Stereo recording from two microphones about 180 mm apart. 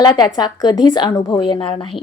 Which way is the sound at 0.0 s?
25° left (ahead or behind).